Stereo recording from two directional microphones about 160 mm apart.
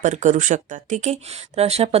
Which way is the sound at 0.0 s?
50° right (ahead or behind).